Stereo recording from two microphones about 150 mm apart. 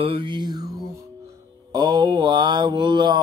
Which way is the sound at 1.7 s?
30° right (ahead or behind).